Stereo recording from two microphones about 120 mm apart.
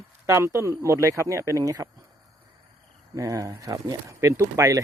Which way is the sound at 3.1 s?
30° right (ahead or behind).